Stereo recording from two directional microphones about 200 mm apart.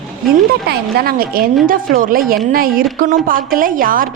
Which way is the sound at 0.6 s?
50° right (ahead or behind).